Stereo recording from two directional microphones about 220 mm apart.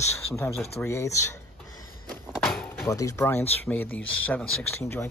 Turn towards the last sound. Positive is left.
turn(degrees=10)  # may be behind; listen again after turning